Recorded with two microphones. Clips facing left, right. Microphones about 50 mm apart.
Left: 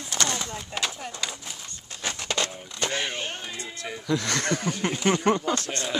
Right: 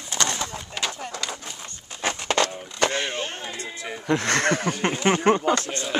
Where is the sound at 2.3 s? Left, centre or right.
Right.